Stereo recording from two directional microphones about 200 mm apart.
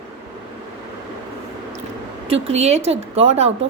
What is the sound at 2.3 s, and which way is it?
A woman's voice, 30° right (ahead or behind).